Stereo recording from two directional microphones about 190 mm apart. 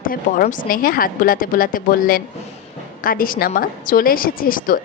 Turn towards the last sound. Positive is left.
turn(degrees=45)  # may be behind; listen again after turning